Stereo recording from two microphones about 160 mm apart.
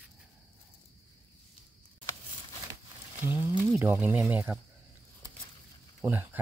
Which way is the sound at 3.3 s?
15° right (ahead or behind).